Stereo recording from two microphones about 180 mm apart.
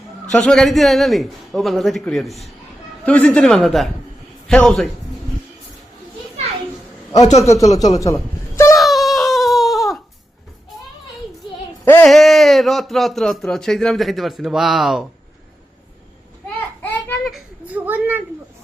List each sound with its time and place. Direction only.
0.3 s a man's voice: 5° left (ahead or behind)
7.1 s a man's voice: 40° left (ahead or behind)
7.4 s speech: 15° left (ahead or behind)
7.9 s chuckle: 15° left (ahead or behind)
8.7 s wail: centre (ahead or behind)
11.9 s a man's voice: 5° left (ahead or behind)
16.8 s a sound: 10° left (ahead or behind)
17.2 s a sound: 5° right (ahead or behind)